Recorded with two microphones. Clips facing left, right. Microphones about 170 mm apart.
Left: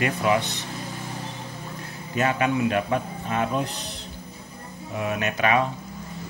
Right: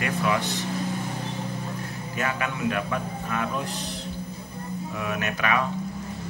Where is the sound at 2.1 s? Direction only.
25° left (ahead or behind).